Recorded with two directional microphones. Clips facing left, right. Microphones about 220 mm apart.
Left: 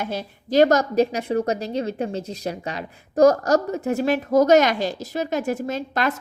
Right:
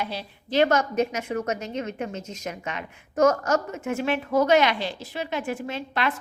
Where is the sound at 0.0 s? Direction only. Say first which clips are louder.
Left 4 dB; 45° left (ahead or behind).